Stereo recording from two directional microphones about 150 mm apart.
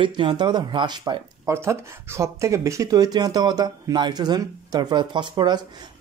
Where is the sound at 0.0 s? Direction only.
35° right (ahead or behind).